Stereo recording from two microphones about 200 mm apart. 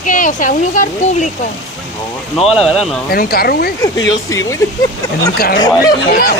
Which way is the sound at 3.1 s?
50° left (ahead or behind).